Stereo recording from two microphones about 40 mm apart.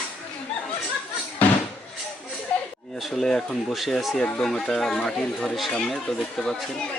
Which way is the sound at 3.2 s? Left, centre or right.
Centre.